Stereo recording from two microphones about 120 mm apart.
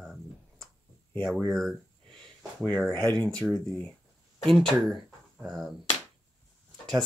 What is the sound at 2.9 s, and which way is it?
Speech, 10° left (ahead or behind).